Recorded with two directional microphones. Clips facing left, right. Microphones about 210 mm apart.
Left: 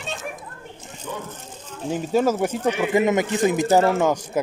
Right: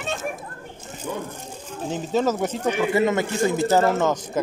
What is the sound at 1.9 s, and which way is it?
Speech, 10° left (ahead or behind).